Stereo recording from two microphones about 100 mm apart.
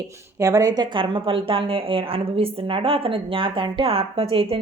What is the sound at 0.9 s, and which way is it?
A woman's voice, 60° right (ahead or behind).